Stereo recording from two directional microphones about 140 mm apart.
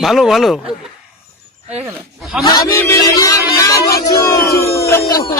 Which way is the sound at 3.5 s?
20° left (ahead or behind).